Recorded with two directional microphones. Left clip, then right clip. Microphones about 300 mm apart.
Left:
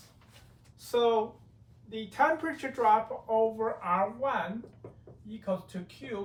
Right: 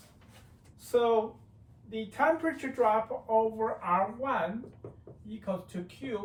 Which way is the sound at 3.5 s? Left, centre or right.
Centre.